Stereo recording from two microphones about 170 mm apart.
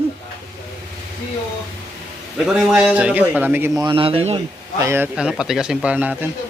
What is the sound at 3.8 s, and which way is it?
Speech, 30° right (ahead or behind).